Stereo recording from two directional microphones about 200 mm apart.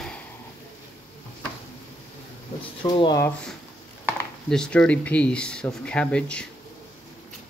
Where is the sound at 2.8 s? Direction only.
25° left (ahead or behind).